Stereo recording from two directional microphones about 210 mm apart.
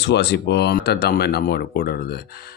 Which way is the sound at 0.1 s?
55° left (ahead or behind).